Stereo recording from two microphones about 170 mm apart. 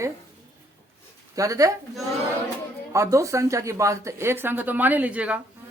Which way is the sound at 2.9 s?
20° right (ahead or behind).